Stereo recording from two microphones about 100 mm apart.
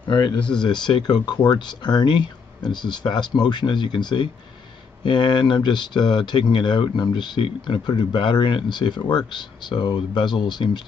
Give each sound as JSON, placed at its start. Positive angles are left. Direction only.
{"t": 0.4, "sound": "speech", "side_deg": 10}
{"t": 0.7, "sound": "speech", "side_deg": 45}